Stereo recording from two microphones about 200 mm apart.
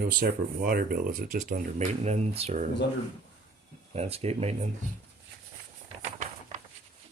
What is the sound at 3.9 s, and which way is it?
Speech, 30° right (ahead or behind).